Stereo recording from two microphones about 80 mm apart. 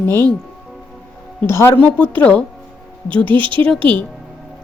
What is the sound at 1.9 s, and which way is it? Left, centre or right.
Speech, left.